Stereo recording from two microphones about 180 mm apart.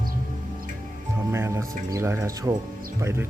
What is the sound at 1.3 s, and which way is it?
Speech, 15° right (ahead or behind).